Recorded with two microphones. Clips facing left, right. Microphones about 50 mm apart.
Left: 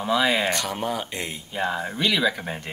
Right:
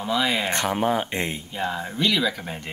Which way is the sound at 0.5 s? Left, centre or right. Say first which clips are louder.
Right 3 dB; right.